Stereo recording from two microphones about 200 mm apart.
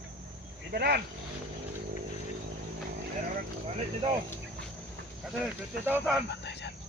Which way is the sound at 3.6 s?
25° right (ahead or behind).